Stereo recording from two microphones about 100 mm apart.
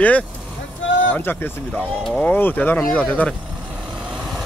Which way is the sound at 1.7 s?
5° left (ahead or behind).